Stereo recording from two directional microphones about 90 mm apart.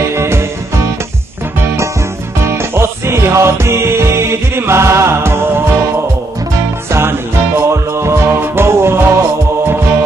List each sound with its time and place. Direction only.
0.1 s music: 30° right (ahead or behind)
2.7 s music: 30° right (ahead or behind)
6.9 s music: 30° right (ahead or behind)